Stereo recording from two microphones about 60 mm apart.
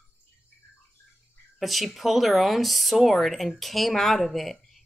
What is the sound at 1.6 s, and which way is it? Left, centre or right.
Speech, centre.